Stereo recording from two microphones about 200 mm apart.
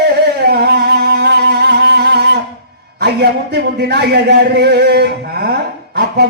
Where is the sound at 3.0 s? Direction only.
55° right (ahead or behind).